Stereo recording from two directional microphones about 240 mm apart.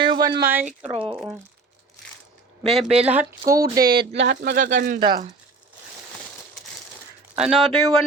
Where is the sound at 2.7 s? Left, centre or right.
Centre.